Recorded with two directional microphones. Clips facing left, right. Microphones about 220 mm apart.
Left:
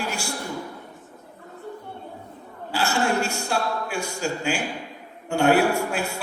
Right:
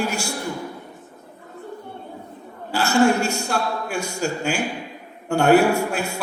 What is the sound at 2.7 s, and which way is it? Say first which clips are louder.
A man's voice: right 6 dB; 45° right (ahead or behind).